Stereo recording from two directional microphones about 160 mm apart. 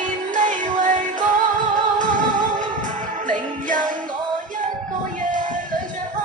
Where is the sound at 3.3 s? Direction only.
55° right (ahead or behind).